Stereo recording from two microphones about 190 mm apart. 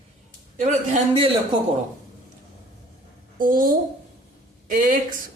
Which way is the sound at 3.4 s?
45° right (ahead or behind).